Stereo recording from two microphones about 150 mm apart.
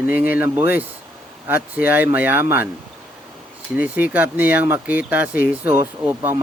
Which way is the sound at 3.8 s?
10° right (ahead or behind).